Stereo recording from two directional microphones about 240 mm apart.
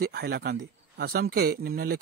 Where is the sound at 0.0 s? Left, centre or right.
Right.